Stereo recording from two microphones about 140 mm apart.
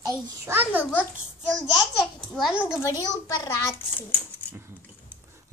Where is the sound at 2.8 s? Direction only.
25° left (ahead or behind).